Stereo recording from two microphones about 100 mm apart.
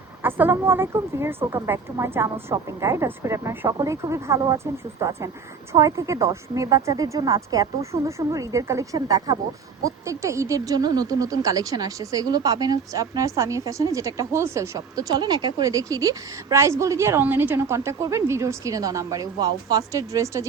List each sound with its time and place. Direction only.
0.2 s a sound: 20° right (ahead or behind)
0.5 s a woman's voice: 25° right (ahead or behind)
3.7 s speech: 35° right (ahead or behind)